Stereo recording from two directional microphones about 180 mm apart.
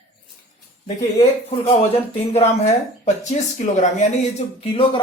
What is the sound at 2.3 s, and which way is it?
Speech, 40° left (ahead or behind).